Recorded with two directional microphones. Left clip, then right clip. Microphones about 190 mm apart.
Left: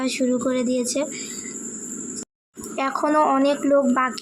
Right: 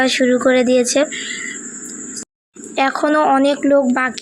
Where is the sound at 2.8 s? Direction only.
20° right (ahead or behind).